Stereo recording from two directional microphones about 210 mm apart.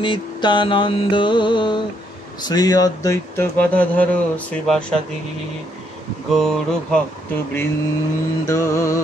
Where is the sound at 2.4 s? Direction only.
20° left (ahead or behind).